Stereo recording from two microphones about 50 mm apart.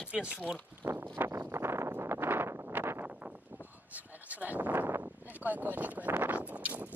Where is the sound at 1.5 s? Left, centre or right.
Right.